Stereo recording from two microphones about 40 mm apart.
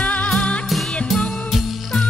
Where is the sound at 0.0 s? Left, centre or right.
Left.